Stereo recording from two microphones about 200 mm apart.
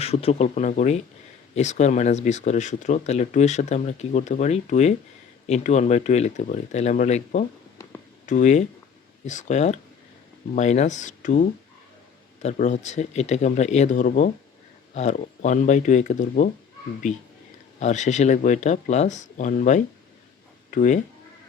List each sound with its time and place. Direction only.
0.0 s speech: 30° left (ahead or behind)